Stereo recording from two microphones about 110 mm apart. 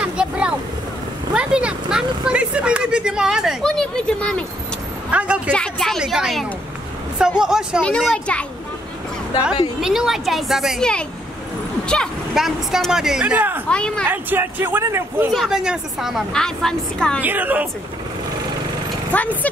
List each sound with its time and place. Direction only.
0.0 s vehicle: 10° right (ahead or behind)
1.3 s speech: 10° right (ahead or behind)
3.6 s a woman's voice: 5° left (ahead or behind)
5.1 s speech: 10° right (ahead or behind)
5.5 s a woman's voice: 5° left (ahead or behind)
8.1 s a child's voice: 10° left (ahead or behind)
9.8 s a woman's voice: 5° right (ahead or behind)
12.4 s a woman's voice: 5° right (ahead or behind)
13.7 s a child's voice: 10° left (ahead or behind)
14.1 s speech: 20° right (ahead or behind)
15.3 s a woman's voice: 5° right (ahead or behind)
17.2 s speech: 15° right (ahead or behind)
19.1 s speech: 15° left (ahead or behind)